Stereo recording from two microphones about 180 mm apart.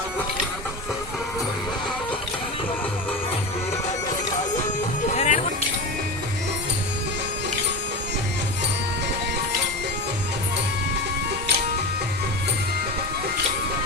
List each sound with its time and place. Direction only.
5.1 s music: 40° left (ahead or behind)